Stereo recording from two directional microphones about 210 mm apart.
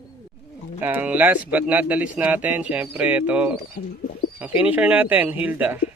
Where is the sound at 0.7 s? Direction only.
10° right (ahead or behind).